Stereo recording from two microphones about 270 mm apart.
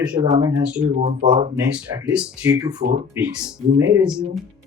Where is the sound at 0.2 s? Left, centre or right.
Centre.